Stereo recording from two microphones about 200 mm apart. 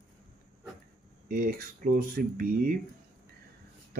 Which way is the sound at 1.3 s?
45° right (ahead or behind).